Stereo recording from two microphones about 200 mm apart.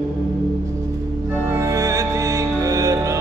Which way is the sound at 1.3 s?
15° right (ahead or behind).